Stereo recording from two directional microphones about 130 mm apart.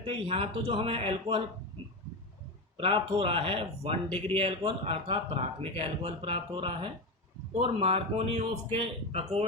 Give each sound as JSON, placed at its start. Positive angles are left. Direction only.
{"t": 0.0, "sound": "speech", "side_deg": -45}
{"t": 2.7, "sound": "speech", "side_deg": -45}